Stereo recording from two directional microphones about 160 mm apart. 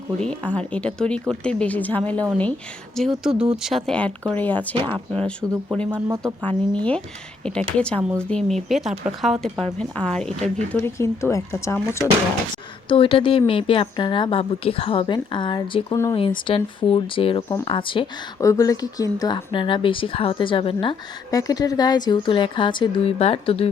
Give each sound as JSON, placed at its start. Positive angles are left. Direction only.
{"t": 0.2, "sound": "speech", "side_deg": 10}
{"t": 12.9, "sound": "speech", "side_deg": 35}
{"t": 18.3, "sound": "speech", "side_deg": 20}
{"t": 21.2, "sound": "a woman's voice", "side_deg": 20}